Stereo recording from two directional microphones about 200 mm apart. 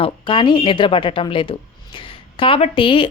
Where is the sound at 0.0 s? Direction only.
25° left (ahead or behind).